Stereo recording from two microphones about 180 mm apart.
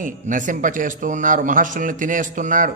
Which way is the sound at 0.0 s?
45° right (ahead or behind).